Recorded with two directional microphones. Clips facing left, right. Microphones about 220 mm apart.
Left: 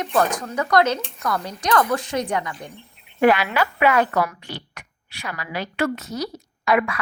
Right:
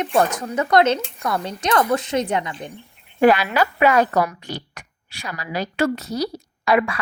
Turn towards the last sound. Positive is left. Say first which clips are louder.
# right 2 dB
turn(degrees=-30)  # may be behind; listen again after turning